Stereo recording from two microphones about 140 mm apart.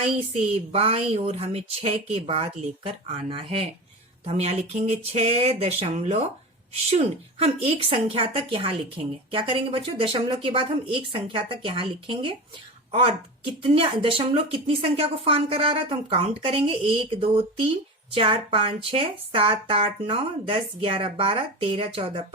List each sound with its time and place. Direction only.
0.3 s a woman's voice: 45° right (ahead or behind)